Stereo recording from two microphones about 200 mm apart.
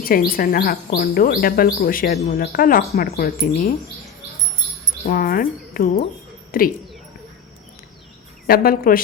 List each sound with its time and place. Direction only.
0.0 s speech: 45° left (ahead or behind)
5.0 s speech: 45° left (ahead or behind)
8.4 s speech: 50° left (ahead or behind)